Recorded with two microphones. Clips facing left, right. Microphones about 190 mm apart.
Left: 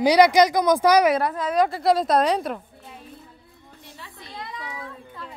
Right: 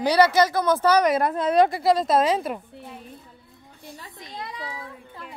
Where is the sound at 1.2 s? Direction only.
25° right (ahead or behind).